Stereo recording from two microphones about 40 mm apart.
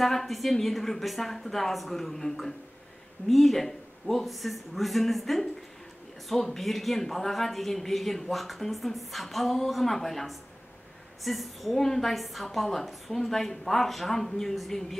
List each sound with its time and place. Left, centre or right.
0.0 s a woman's voice: centre